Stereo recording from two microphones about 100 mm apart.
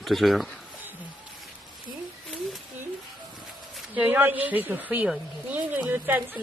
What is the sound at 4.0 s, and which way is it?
A woman's voice, 20° right (ahead or behind).